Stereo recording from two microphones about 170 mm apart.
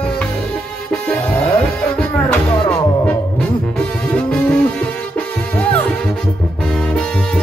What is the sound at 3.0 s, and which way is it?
Music, 5° left (ahead or behind).